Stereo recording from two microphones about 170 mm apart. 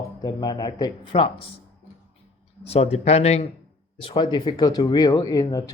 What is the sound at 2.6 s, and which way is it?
Speech, 35° left (ahead or behind).